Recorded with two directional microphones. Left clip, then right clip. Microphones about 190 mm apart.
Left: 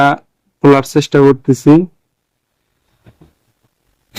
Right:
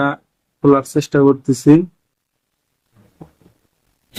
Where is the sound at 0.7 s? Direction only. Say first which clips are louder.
Left 4 dB; 30° left (ahead or behind).